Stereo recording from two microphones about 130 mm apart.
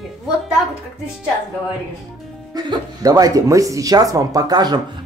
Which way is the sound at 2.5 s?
30° right (ahead or behind).